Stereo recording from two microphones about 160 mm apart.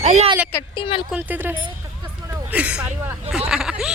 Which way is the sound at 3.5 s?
5° right (ahead or behind).